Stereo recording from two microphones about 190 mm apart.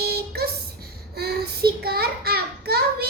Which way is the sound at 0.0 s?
55° right (ahead or behind).